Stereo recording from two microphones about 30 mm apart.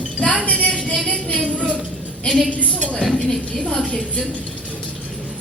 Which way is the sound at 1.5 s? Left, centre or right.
Right.